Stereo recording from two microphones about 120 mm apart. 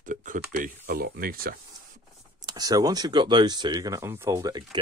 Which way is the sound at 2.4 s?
35° right (ahead or behind).